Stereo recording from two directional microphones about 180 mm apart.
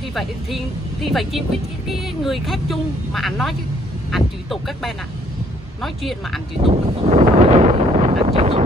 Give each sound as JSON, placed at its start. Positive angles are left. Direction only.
{"t": 0.1, "sound": "speech", "side_deg": 0}
{"t": 6.6, "sound": "wind noise", "side_deg": -35}